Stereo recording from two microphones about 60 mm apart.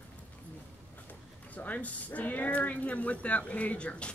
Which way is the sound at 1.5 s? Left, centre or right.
Left.